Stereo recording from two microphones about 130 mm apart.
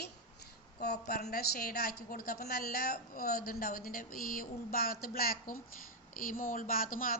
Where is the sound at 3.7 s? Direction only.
90° left.